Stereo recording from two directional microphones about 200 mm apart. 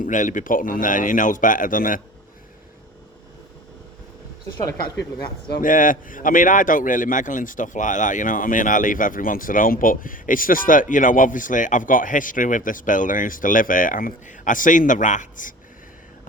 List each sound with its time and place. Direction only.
0.0 s speech: 40° left (ahead or behind)
5.5 s speech: 45° left (ahead or behind)